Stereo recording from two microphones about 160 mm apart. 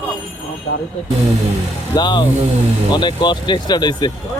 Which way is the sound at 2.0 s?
25° left (ahead or behind).